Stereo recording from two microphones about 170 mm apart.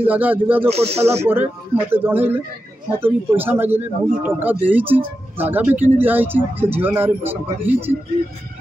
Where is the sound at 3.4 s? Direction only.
10° right (ahead or behind).